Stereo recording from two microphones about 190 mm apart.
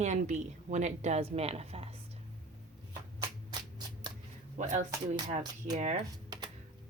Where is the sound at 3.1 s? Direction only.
20° right (ahead or behind).